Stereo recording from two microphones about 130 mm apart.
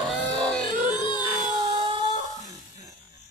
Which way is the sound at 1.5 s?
40° right (ahead or behind).